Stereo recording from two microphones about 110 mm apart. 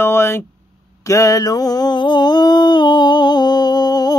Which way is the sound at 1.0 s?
30° left (ahead or behind).